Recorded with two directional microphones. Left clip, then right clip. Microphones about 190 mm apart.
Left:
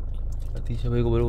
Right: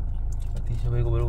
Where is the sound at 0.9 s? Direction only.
55° left (ahead or behind).